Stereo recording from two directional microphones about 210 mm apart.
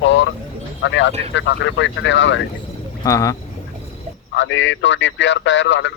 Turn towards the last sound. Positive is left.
turn(degrees=60)  # may be behind; listen again after turning